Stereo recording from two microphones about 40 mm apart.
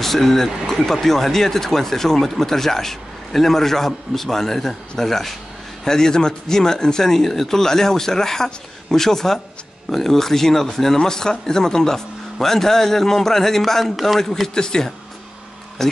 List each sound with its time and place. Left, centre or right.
0.0 s a man's voice: centre
14.5 s speech: centre